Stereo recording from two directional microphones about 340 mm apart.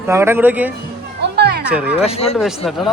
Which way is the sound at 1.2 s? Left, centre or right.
Right.